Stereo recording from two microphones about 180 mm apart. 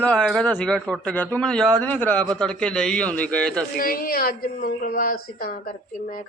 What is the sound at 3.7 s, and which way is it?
A woman's voice, 55° left (ahead or behind).